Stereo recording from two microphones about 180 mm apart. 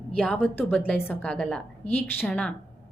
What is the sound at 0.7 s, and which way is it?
A woman's voice, 10° left (ahead or behind).